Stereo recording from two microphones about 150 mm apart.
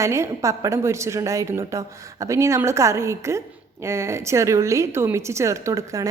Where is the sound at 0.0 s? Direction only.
20° right (ahead or behind).